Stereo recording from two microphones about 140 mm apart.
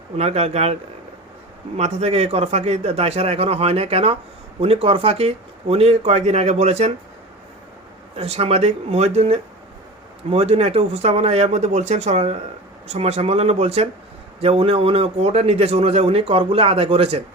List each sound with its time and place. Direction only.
0.2 s speech: 45° right (ahead or behind)
8.1 s speech: 45° right (ahead or behind)